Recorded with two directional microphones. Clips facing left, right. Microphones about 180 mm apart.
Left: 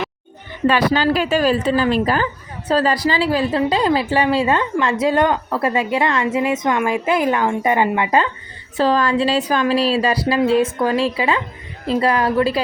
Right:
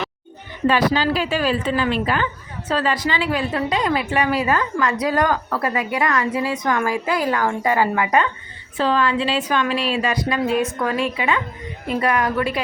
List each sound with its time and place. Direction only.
0.7 s a woman's voice: 60° left (ahead or behind); by 8.3 s 25° left (ahead or behind)
8.8 s a woman's voice: 40° left (ahead or behind)